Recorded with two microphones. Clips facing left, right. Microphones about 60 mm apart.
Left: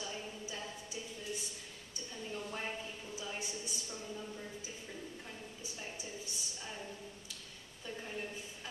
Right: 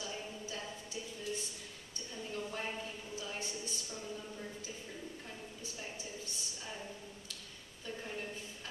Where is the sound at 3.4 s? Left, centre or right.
Centre.